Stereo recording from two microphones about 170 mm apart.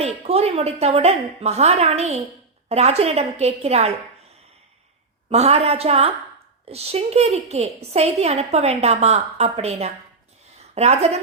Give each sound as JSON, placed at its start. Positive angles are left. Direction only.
{"t": 0.0, "sound": "a woman's voice", "side_deg": -35}
{"t": 5.3, "sound": "a woman's voice", "side_deg": -40}